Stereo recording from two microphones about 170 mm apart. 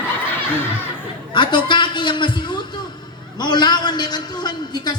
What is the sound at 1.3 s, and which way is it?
A man's voice, 30° left (ahead or behind).